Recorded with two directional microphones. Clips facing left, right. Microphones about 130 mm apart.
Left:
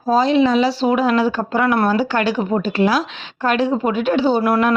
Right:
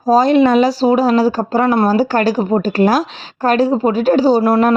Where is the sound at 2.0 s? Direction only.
40° right (ahead or behind).